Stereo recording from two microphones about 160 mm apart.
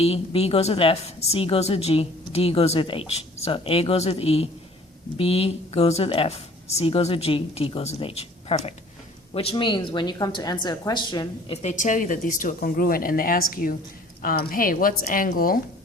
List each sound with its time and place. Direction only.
0.0 s a woman's voice: 40° left (ahead or behind)
11.5 s speech: 50° left (ahead or behind); by 15.6 s 65° left (ahead or behind)